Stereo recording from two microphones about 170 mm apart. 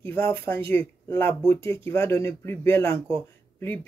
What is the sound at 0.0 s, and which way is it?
Speech, 15° left (ahead or behind).